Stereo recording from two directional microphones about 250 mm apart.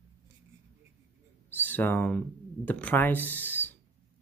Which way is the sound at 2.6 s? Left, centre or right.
Centre.